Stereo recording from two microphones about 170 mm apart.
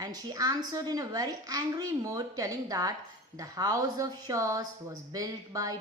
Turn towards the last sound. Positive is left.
turn(degrees=-20)  # may be behind; listen again after turning